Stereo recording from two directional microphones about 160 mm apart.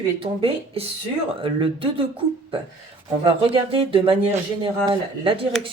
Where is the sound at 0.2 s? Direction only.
35° right (ahead or behind).